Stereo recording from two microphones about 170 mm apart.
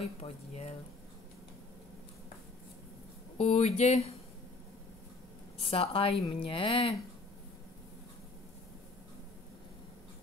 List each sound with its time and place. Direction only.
0.2 s speech: 40° left (ahead or behind)
3.3 s speech: 40° left (ahead or behind)
5.6 s speech: 35° left (ahead or behind)